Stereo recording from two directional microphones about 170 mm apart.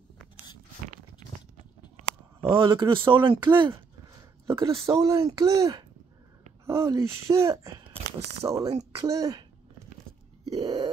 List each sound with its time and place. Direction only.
2.4 s speech: 30° right (ahead or behind)
4.5 s speech: 15° right (ahead or behind)
10.5 s grunt: 25° right (ahead or behind)